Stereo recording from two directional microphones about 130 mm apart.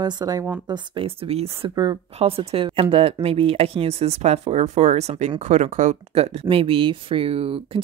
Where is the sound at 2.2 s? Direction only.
45° right (ahead or behind).